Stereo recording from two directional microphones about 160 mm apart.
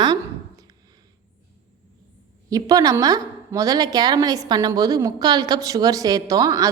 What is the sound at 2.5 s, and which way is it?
Speech, 20° right (ahead or behind).